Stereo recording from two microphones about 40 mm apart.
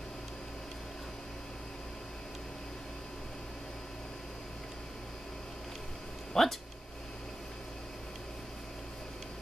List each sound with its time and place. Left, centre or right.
6.4 s speech: centre